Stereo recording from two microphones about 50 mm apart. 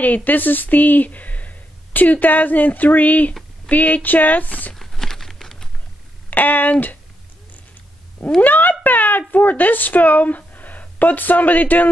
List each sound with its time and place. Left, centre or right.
0.0 s speech: left
4.7 s crumpling: centre
6.3 s speech: left
8.4 s a sound: left
9.3 s a woman's voice: left